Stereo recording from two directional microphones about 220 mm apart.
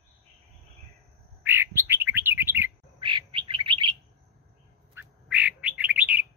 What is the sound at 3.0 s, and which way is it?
Bird, 20° right (ahead or behind).